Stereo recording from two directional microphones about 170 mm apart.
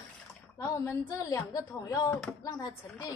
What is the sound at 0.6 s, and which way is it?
A woman's voice, 20° left (ahead or behind).